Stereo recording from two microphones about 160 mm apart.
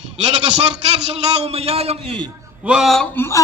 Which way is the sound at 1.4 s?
40° right (ahead or behind).